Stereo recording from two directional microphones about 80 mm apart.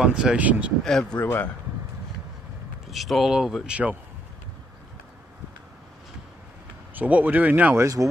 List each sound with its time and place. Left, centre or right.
0.0 s speech: centre
0.8 s speech: centre
1.2 s speech: left
2.9 s speech: centre
7.0 s speech: centre
7.7 s speech: right